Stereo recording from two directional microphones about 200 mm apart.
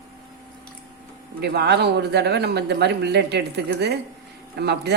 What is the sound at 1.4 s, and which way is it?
Speech, 55° right (ahead or behind).